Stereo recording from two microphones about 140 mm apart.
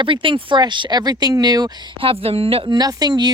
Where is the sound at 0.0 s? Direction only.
35° right (ahead or behind).